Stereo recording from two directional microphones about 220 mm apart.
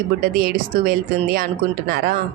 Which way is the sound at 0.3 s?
40° right (ahead or behind).